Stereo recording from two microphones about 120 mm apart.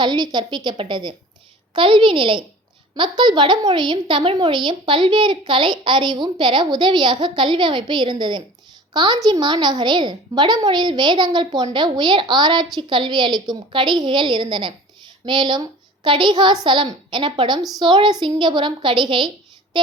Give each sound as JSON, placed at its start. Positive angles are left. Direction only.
{"t": 0.0, "sound": "a woman's voice", "side_deg": -40}